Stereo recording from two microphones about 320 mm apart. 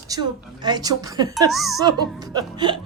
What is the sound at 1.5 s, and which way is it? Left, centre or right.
Speech, centre.